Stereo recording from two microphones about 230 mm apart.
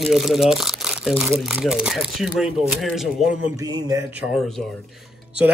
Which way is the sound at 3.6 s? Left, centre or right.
Centre.